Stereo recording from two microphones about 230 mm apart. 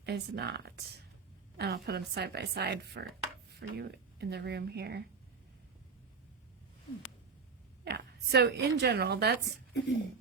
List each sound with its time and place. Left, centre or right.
0.0 s a woman's voice: right
7.9 s a woman's voice: right
9.5 s a woman's voice: left